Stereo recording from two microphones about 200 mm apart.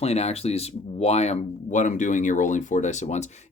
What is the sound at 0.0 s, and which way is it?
Speech, 30° left (ahead or behind).